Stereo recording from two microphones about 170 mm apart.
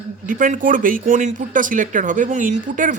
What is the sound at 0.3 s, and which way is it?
Speech, 50° right (ahead or behind).